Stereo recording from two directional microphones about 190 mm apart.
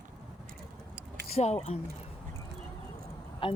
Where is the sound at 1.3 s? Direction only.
35° left (ahead or behind).